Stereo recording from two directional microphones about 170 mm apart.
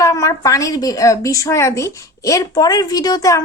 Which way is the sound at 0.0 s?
20° left (ahead or behind).